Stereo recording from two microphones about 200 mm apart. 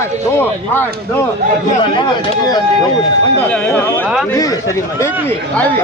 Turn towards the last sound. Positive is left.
turn(degrees=10)  # may be behind; listen again after turning